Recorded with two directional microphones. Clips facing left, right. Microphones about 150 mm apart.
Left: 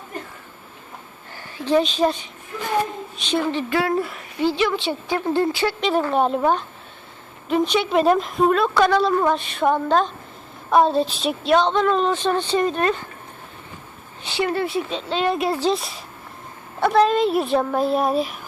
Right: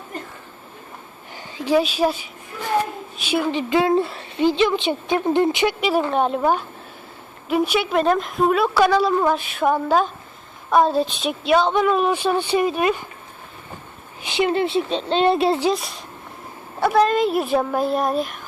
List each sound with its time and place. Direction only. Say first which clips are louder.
1.4 s a woman's voice: even; 15° right (ahead or behind)
6.1 s a woman's voice: even; centre (ahead or behind)
14.3 s a woman's voice: right 3 dB; 20° right (ahead or behind)
15.7 s a woman's voice: even; centre (ahead or behind)